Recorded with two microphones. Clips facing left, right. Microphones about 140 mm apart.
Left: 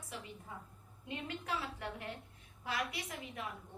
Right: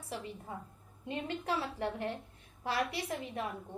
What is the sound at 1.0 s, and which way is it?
A woman's voice, 35° right (ahead or behind).